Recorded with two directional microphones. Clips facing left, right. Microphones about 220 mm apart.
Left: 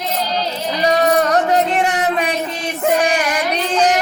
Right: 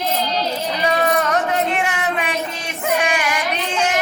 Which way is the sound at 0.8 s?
40° left (ahead or behind).